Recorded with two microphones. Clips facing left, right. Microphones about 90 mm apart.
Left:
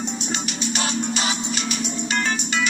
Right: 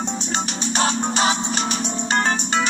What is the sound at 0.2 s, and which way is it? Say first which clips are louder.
Music: right 2 dB; 35° right (ahead or behind).